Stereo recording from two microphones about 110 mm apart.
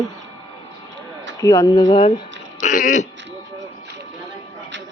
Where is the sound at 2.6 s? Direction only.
90° left.